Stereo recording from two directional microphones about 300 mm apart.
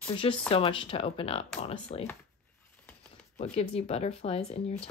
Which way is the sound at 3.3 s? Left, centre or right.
Left.